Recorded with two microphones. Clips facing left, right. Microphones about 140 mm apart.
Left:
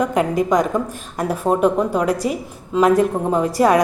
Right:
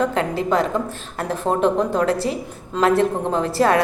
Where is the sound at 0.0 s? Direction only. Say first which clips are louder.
Left 3 dB; 15° left (ahead or behind).